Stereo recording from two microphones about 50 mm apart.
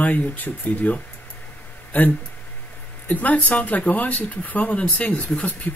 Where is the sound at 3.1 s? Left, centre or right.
Left.